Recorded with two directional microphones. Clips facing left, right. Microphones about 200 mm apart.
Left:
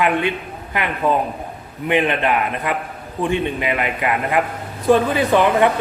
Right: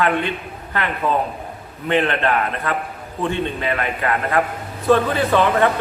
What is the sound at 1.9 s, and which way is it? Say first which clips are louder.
Speech: left 1 dB; 15° left (ahead or behind).